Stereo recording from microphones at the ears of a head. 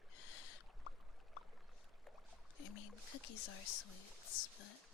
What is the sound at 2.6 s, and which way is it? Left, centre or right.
Speech, left.